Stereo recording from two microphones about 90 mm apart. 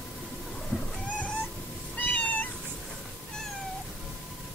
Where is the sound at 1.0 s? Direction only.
15° left (ahead or behind).